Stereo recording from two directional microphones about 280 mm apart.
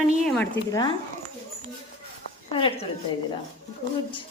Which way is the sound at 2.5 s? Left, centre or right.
Centre.